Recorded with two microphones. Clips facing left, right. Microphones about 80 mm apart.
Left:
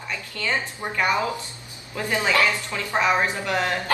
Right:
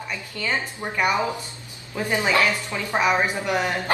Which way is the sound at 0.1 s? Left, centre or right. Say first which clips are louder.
Left 1 dB; centre.